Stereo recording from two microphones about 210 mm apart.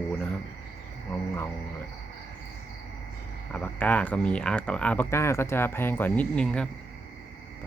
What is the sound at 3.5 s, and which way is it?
Speech, 5° left (ahead or behind).